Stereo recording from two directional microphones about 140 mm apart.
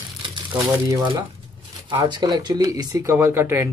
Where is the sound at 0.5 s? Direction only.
30° right (ahead or behind).